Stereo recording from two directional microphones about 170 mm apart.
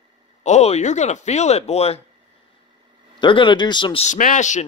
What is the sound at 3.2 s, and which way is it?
Speech, 30° left (ahead or behind).